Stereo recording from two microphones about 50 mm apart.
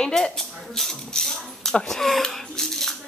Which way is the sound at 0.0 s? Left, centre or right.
Centre.